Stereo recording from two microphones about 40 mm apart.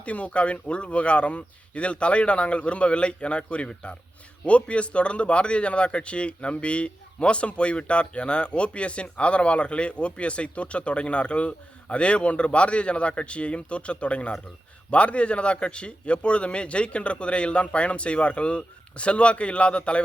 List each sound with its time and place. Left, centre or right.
0.0 s a man's voice: left